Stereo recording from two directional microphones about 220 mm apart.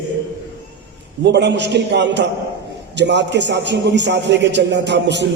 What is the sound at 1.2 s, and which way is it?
A man's voice, 50° right (ahead or behind).